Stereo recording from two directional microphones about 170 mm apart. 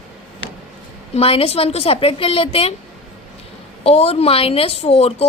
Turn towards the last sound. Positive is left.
turn(degrees=35)  # may be behind; listen again after turning